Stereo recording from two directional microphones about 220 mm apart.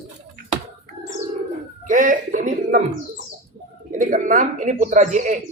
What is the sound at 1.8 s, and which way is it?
Bird, 35° right (ahead or behind).